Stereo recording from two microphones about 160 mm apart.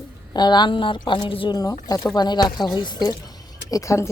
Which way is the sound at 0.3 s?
25° left (ahead or behind).